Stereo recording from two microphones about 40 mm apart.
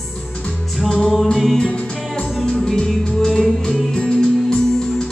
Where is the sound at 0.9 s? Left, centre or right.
Centre.